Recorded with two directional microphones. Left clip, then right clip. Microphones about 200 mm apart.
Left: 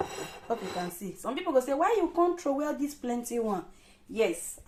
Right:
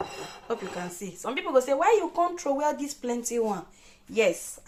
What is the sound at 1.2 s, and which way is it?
Speech, 15° right (ahead or behind).